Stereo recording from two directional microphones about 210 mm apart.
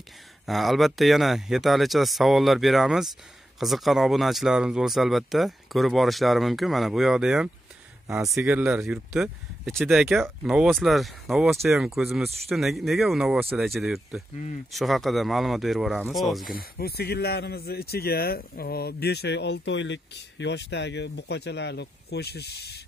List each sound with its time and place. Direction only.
0.5 s speech: centre (ahead or behind)
16.5 s speech: 45° left (ahead or behind)